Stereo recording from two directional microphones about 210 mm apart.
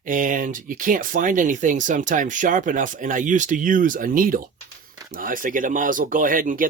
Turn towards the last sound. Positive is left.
turn(degrees=-40)  # may be behind; listen again after turning